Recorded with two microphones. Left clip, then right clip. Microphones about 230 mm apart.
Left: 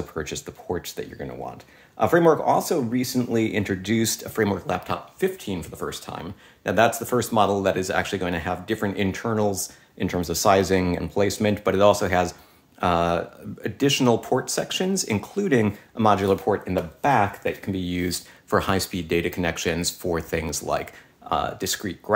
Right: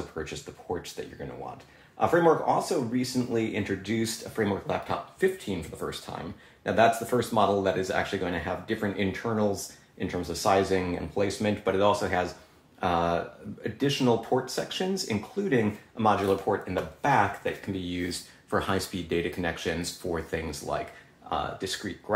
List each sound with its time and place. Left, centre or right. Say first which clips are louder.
0.1 s speech: left 5 dB; left
2.0 s speech: left 4 dB; left